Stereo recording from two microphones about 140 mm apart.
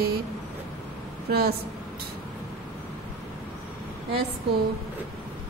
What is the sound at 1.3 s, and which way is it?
Speech, 90° right.